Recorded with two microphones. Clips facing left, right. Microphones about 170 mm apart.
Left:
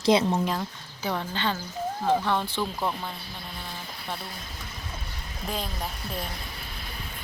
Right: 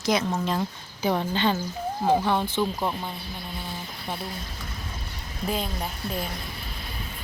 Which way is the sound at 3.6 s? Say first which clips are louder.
Right 1 dB; 10° right (ahead or behind).